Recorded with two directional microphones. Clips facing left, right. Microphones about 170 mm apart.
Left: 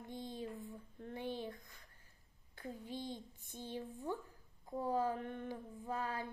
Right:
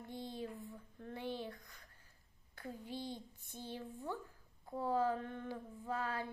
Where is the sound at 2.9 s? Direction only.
15° left (ahead or behind).